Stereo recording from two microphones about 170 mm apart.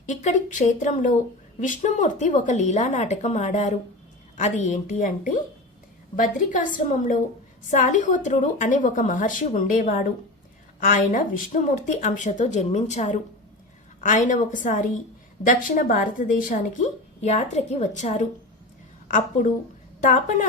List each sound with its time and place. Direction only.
0.0 s a woman's voice: 45° left (ahead or behind)